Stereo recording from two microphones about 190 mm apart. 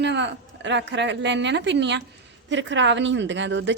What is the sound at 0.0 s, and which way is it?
A woman's voice, 65° right (ahead or behind).